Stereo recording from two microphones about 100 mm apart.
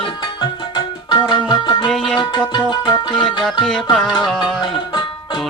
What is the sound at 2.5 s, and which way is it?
Music, 45° left (ahead or behind).